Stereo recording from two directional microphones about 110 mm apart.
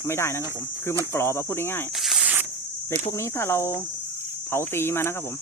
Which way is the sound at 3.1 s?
25° left (ahead or behind).